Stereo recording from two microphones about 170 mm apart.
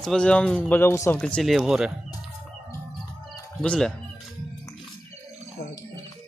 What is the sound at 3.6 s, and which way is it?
Speech, 5° left (ahead or behind).